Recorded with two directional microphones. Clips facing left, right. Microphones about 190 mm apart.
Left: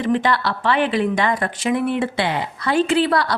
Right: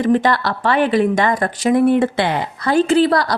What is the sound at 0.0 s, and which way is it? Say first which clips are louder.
Speech: right 4 dB; 45° right (ahead or behind).